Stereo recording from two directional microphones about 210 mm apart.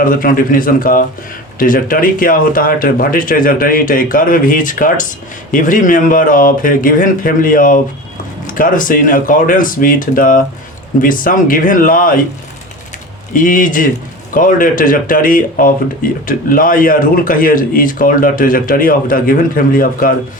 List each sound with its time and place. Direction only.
0.0 s speech: 40° left (ahead or behind)
13.3 s speech: 40° left (ahead or behind)